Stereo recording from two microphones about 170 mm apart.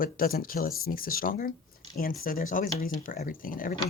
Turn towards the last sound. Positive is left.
turn(degrees=55)  # may be behind; listen again after turning